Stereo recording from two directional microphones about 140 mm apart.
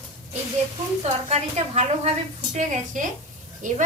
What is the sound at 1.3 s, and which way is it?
A woman's voice, 50° right (ahead or behind).